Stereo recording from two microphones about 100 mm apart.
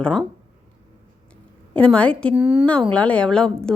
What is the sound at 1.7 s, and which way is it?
Speech, 10° left (ahead or behind).